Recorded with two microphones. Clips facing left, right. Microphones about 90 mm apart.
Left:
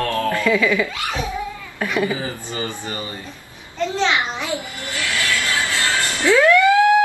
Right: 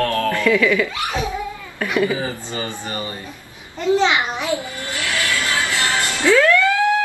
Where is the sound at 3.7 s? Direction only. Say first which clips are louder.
Right 3 dB; 15° right (ahead or behind).